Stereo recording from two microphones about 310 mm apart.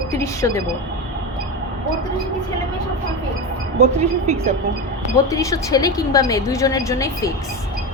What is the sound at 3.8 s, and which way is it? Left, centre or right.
Speech, right.